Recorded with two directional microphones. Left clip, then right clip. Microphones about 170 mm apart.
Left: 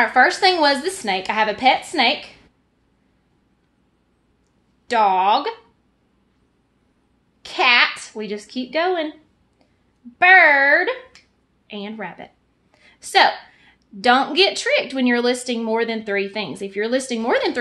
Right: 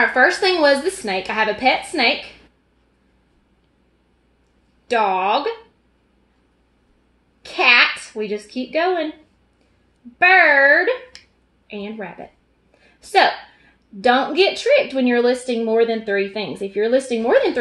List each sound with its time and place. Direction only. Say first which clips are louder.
0.1 s speech: left 1 dB; 30° left (ahead or behind)
4.8 s a woman's voice: left 2 dB; 30° left (ahead or behind)
7.4 s a child's voice: right 2 dB; 30° left (ahead or behind)
10.1 s a woman's voice: left 1 dB; 35° left (ahead or behind)